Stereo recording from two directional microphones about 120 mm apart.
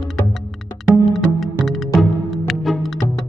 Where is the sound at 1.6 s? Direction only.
Centre (ahead or behind).